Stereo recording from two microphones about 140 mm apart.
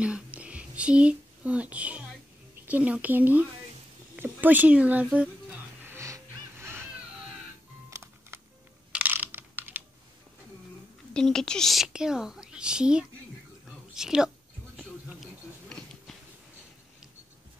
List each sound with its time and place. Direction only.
0.0 s whispering: 10° right (ahead or behind)
2.6 s speech: 10° right (ahead or behind)
5.9 s music: 20° right (ahead or behind)
7.9 s music: 20° right (ahead or behind)
8.9 s computer keyboard: 10° right (ahead or behind)
11.1 s a woman's voice: 5° left (ahead or behind)
13.7 s a sound: 5° right (ahead or behind)